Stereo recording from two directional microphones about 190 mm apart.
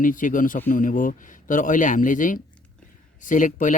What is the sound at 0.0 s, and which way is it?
Speech, 45° left (ahead or behind).